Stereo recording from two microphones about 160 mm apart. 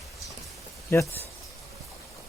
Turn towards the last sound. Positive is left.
turn(degrees=15)  # may be behind; listen again after turning